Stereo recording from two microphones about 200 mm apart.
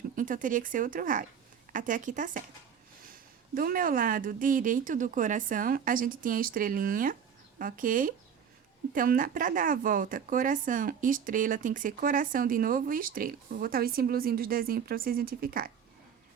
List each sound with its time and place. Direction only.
0.2 s a woman's voice: 40° right (ahead or behind)
3.5 s speech: 45° right (ahead or behind)